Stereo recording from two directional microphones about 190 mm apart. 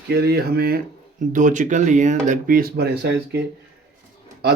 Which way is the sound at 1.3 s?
40° right (ahead or behind).